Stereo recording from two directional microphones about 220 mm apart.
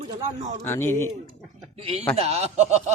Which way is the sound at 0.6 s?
10° left (ahead or behind).